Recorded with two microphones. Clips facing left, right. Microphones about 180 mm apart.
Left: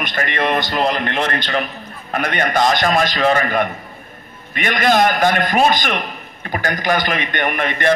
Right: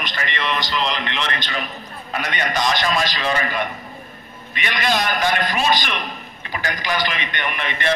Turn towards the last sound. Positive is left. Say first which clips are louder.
# left 6 dB
turn(degrees=50)  # may be behind; listen again after turning